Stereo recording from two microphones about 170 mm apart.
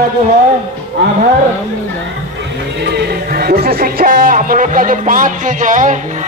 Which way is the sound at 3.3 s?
65° right (ahead or behind).